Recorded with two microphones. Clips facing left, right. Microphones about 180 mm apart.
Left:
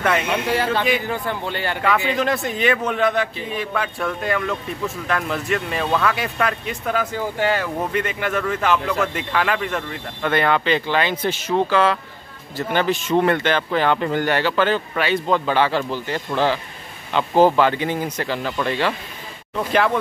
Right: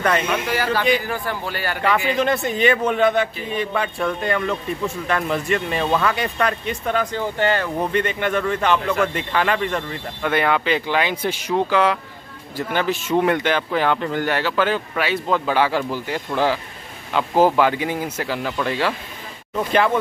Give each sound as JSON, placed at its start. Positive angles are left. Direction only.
{"t": 0.3, "sound": "a man's voice", "side_deg": 25}
{"t": 2.0, "sound": "speech", "side_deg": 0}